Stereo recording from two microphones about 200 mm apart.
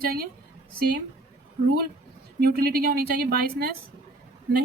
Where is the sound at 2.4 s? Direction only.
50° right (ahead or behind).